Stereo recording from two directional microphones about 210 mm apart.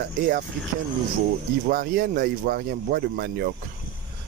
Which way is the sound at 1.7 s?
45° right (ahead or behind).